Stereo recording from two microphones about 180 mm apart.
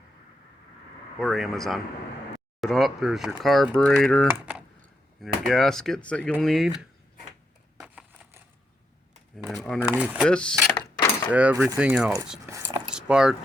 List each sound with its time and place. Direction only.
1.2 s speech: centre (ahead or behind)
7.8 s crushing: 5° right (ahead or behind)
9.5 s speech: centre (ahead or behind)
10.2 s speech: 5° left (ahead or behind)
11.3 s speech: 5° right (ahead or behind)
12.5 s dog: 15° right (ahead or behind)
12.9 s squish: 5° right (ahead or behind)